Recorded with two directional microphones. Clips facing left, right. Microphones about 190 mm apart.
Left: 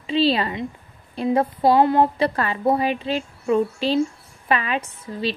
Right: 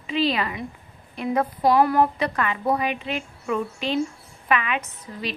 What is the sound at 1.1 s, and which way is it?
A woman's voice, 30° left (ahead or behind).